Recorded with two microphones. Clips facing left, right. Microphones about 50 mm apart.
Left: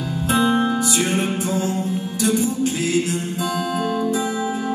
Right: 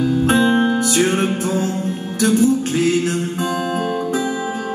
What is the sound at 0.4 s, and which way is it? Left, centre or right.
Music, centre.